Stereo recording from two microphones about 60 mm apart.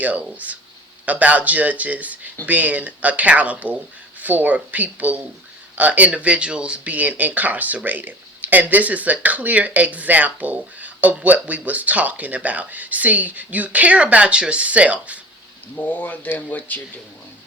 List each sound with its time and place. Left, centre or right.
0.0 s speech: right
15.7 s speech: left